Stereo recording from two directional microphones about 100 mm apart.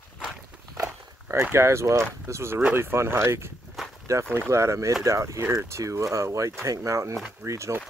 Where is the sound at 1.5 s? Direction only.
30° right (ahead or behind).